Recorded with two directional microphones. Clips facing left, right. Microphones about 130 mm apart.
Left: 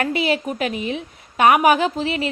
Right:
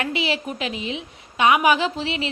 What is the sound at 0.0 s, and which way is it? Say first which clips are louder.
A woman's voice: left 4 dB; 45° left (ahead or behind).